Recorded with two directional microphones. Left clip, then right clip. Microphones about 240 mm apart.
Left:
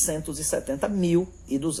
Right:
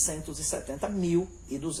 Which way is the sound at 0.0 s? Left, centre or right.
Left.